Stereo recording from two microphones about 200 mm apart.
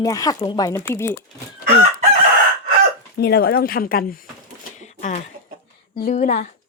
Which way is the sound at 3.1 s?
50° left (ahead or behind).